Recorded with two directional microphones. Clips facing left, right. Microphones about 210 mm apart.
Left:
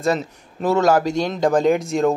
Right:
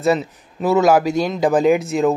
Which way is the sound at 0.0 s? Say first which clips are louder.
Right 3 dB; 5° right (ahead or behind).